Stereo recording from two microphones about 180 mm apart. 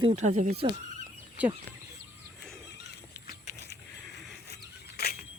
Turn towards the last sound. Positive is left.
turn(degrees=60)  # may be behind; listen again after turning